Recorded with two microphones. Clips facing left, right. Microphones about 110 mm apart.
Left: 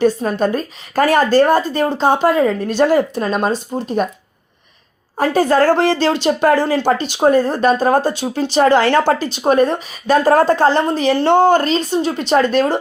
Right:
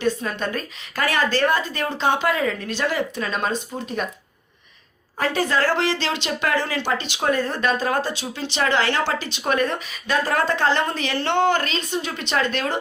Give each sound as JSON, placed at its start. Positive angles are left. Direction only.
{"t": 0.0, "sound": "speech", "side_deg": 40}
{"t": 3.5, "sound": "speech", "side_deg": 35}
{"t": 5.1, "sound": "speech", "side_deg": 45}